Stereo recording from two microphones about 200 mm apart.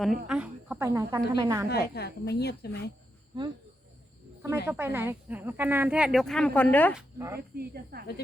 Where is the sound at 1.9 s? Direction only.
55° left (ahead or behind).